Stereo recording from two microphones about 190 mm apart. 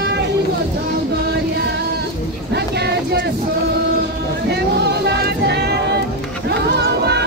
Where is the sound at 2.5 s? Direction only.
60° right (ahead or behind).